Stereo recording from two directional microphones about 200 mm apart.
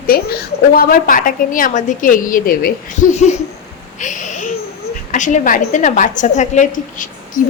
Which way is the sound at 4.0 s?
40° left (ahead or behind).